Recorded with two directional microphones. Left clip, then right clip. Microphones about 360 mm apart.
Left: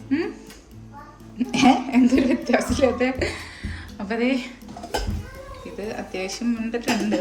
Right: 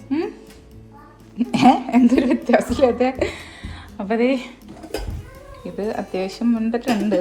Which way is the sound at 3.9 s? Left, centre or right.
Centre.